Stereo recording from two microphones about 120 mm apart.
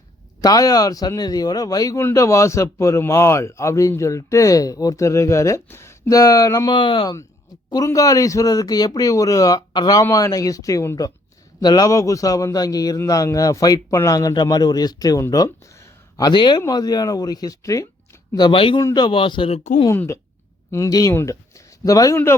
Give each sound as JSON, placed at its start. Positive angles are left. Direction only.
{"t": 0.4, "sound": "a man's voice", "side_deg": 30}
{"t": 6.7, "sound": "speech", "side_deg": 40}
{"t": 7.9, "sound": "a man's voice", "side_deg": 30}
{"t": 18.3, "sound": "speech", "side_deg": 45}
{"t": 18.8, "sound": "speech", "side_deg": 30}
{"t": 19.9, "sound": "a man's voice", "side_deg": 25}